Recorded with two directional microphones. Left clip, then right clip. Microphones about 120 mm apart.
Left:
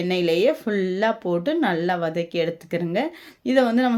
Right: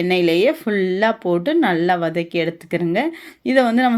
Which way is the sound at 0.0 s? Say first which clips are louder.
Right 4 dB; 25° right (ahead or behind).